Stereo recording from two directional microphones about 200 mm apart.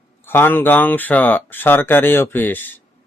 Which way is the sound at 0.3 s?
10° left (ahead or behind).